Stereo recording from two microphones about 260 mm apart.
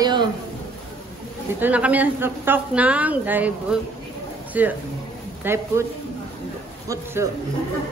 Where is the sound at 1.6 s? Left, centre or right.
Centre.